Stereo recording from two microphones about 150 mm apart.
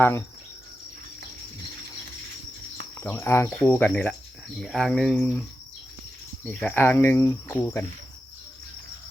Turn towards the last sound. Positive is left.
turn(degrees=15)  # may be behind; listen again after turning